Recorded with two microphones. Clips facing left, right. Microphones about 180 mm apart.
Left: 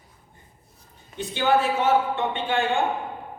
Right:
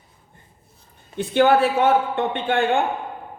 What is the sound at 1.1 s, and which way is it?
Speech, 55° right (ahead or behind).